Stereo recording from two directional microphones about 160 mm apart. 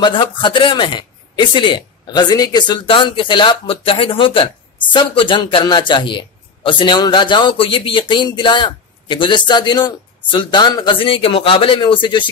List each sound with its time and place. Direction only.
0.0 s speech: 30° left (ahead or behind)